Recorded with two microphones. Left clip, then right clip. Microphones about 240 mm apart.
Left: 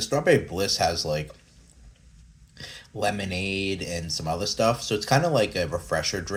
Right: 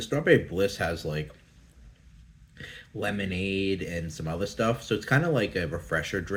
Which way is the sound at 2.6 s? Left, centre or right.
Left.